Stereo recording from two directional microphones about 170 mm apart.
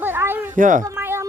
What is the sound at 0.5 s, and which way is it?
Speech, 50° right (ahead or behind).